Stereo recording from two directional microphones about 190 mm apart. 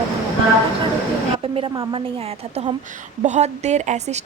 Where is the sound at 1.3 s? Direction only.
30° right (ahead or behind).